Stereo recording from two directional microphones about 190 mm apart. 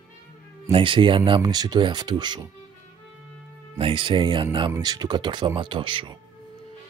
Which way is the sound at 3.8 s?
25° right (ahead or behind).